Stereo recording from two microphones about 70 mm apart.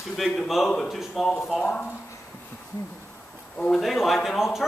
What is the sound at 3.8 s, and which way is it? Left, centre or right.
Speech, centre.